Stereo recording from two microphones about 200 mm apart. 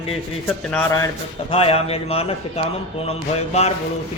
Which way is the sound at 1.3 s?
30° left (ahead or behind).